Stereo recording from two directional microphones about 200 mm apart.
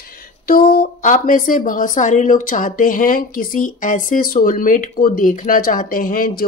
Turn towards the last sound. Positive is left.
turn(degrees=45)  # may be behind; listen again after turning